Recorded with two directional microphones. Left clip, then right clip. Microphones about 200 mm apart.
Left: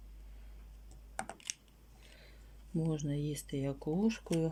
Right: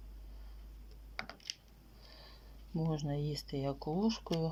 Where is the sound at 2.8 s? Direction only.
20° left (ahead or behind).